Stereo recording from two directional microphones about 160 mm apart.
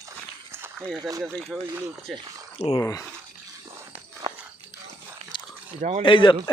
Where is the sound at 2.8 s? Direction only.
20° left (ahead or behind).